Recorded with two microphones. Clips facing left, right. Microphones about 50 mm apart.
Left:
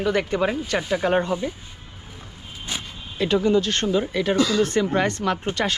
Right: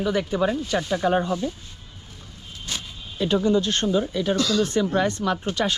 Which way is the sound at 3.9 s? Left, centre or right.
Left.